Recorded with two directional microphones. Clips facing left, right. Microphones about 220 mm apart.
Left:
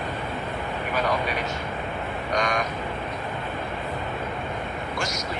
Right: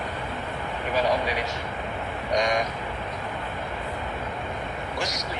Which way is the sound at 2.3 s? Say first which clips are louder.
Right 2 dB; 20° right (ahead or behind).